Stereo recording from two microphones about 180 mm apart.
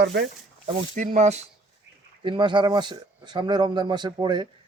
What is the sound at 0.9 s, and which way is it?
Speech, 45° right (ahead or behind).